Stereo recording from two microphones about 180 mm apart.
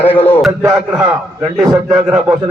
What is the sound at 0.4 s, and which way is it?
A man's voice, 5° right (ahead or behind).